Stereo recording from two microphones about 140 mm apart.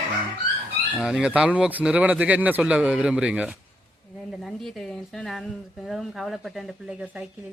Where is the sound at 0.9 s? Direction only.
5° right (ahead or behind).